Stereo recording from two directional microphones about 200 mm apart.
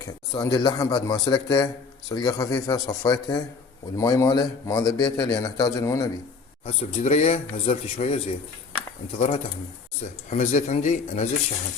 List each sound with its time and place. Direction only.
0.3 s a man's voice: 20° left (ahead or behind)
6.7 s speech: 30° left (ahead or behind)